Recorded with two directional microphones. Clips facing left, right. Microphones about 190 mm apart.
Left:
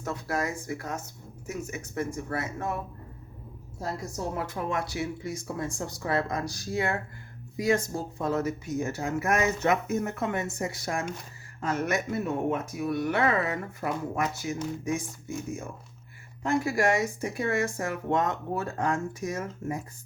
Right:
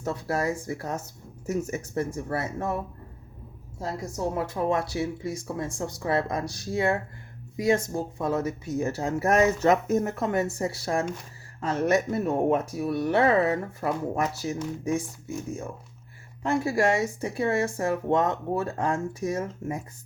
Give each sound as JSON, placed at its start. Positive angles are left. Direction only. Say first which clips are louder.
{"t": 0.0, "sound": "speech", "louder": "right 3 dB", "side_deg": -30}
{"t": 4.4, "sound": "speech", "louder": "right 6 dB", "side_deg": -30}
{"t": 16.5, "sound": "speech", "louder": "right 2 dB", "side_deg": -30}